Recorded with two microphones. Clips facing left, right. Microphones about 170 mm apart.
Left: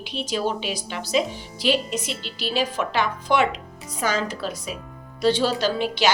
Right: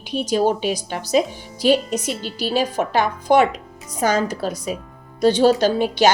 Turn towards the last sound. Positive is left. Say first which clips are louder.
# right 6 dB
turn(degrees=-45)  # may be behind; listen again after turning